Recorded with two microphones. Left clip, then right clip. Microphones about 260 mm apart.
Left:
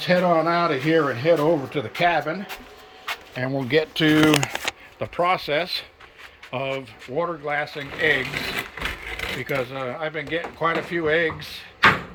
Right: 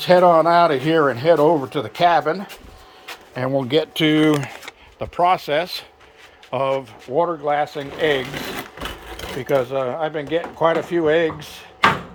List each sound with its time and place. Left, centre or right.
0.0 s speech: centre